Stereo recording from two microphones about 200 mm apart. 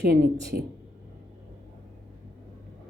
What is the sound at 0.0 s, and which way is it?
Speech, 50° right (ahead or behind).